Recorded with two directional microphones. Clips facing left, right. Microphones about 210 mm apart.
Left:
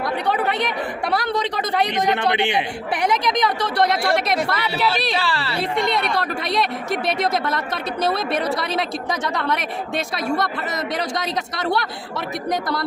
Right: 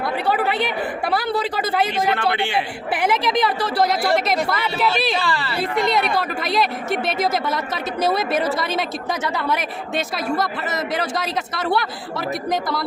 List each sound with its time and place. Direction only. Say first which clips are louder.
0.0 s speech: right 1 dB; 5° right (ahead or behind)
1.9 s a man's voice: left 1 dB; 20° left (ahead or behind)
2.9 s speech: right 1 dB; 5° right (ahead or behind)